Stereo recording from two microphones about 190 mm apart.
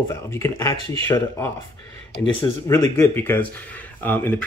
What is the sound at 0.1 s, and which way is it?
Speech, 15° left (ahead or behind).